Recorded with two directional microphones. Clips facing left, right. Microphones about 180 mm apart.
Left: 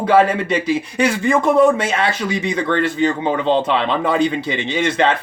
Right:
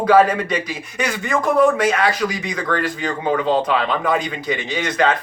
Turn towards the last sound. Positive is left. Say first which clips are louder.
# left 2 dB
turn(degrees=25)  # may be behind; listen again after turning